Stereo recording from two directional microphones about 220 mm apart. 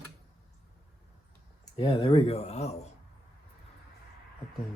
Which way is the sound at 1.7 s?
25° left (ahead or behind).